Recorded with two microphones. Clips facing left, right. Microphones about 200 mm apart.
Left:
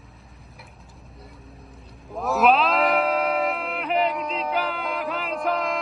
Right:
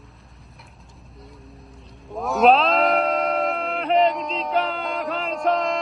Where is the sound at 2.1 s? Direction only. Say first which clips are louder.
Right 3 dB; centre (ahead or behind).